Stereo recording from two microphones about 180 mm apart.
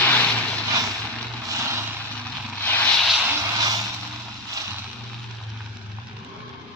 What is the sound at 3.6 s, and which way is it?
Vehicle, 20° right (ahead or behind).